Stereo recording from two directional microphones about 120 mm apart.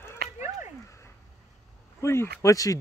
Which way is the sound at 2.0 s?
25° left (ahead or behind).